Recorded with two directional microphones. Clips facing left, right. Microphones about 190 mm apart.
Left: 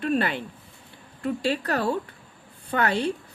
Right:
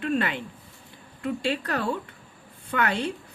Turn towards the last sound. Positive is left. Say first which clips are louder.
# left 2 dB
turn(degrees=35)  # may be behind; listen again after turning